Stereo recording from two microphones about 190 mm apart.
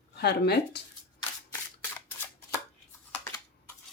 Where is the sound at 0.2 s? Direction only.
60° left (ahead or behind).